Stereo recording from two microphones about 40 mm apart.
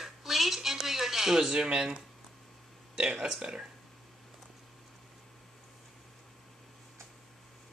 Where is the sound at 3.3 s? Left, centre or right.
Right.